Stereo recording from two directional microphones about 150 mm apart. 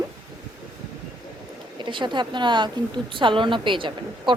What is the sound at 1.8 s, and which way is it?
A woman's voice, 30° right (ahead or behind).